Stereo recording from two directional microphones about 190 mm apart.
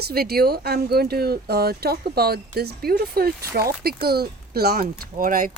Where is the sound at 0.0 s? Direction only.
55° right (ahead or behind).